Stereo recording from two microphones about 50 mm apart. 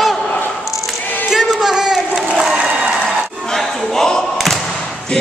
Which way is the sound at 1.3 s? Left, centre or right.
Centre.